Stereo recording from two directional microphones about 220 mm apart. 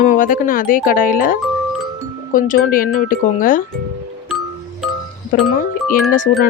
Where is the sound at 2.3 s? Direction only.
40° left (ahead or behind).